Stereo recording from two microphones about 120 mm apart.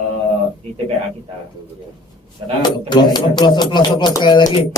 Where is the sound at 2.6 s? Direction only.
35° left (ahead or behind).